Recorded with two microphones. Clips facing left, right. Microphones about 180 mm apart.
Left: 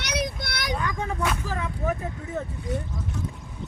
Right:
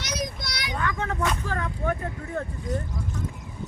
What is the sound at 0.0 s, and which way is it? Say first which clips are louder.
Child singing: left 3 dB; 65° left (ahead or behind).